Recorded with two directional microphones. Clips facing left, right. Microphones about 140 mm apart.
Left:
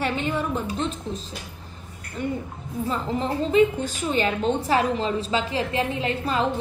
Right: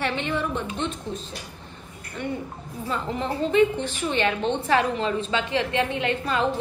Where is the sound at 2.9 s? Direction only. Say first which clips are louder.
Left 1 dB; 35° left (ahead or behind).